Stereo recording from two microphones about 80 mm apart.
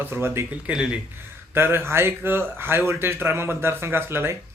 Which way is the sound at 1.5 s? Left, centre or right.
Right.